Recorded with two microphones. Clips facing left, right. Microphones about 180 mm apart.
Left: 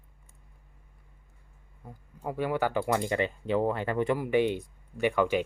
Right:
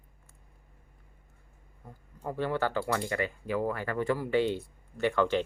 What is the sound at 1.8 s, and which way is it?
Speech, 10° left (ahead or behind).